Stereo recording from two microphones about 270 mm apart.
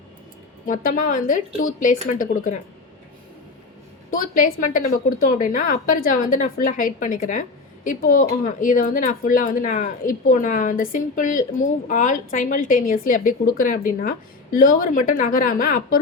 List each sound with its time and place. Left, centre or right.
0.6 s speech: left
4.1 s a woman's voice: left